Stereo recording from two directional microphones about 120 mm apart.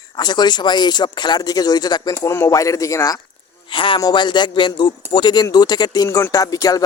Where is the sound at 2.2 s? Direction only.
25° left (ahead or behind).